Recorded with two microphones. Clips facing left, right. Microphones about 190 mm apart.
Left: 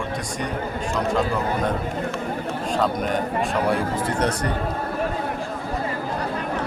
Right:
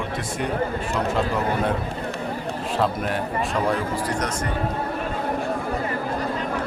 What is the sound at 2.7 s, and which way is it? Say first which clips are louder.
Speech: left 1 dB; 5° right (ahead or behind).